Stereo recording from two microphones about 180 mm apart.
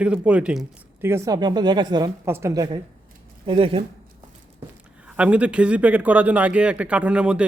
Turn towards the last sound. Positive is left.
turn(degrees=-5)  # may be behind; listen again after turning